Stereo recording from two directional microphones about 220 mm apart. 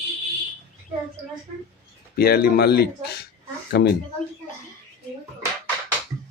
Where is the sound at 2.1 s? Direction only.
45° left (ahead or behind).